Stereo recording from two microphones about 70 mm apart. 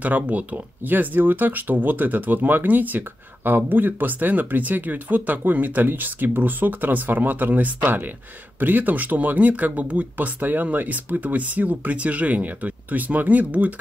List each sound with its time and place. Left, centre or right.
0.0 s speech: right